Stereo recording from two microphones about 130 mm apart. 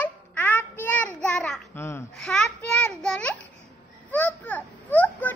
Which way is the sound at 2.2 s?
5° left (ahead or behind).